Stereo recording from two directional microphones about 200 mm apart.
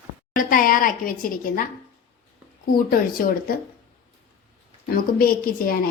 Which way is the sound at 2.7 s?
45° left (ahead or behind).